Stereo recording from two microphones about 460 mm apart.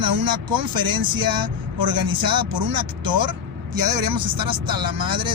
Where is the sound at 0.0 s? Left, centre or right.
Right.